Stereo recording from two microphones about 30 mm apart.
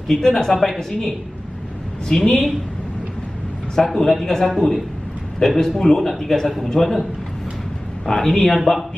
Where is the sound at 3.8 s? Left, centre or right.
Centre.